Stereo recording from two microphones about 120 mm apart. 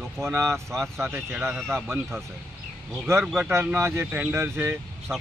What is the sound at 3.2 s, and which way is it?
Speech, 5° right (ahead or behind).